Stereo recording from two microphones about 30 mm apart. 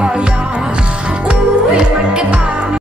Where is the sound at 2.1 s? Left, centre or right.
Right.